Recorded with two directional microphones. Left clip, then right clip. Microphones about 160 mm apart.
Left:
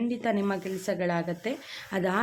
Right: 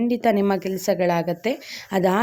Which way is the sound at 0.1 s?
45° right (ahead or behind).